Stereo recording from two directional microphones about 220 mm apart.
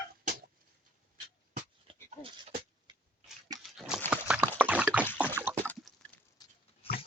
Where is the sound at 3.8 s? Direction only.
5° right (ahead or behind).